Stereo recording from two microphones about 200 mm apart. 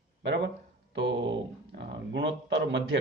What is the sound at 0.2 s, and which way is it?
Speech, 60° right (ahead or behind).